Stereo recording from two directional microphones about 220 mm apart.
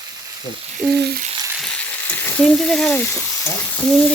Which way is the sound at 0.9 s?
45° right (ahead or behind).